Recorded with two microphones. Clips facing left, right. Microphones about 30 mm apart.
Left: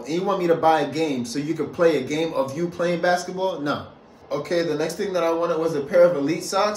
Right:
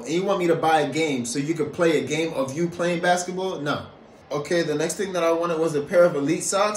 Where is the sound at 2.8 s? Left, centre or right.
Right.